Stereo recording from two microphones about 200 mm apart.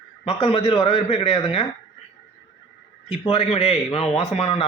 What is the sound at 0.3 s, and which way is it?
A man's voice, 30° left (ahead or behind).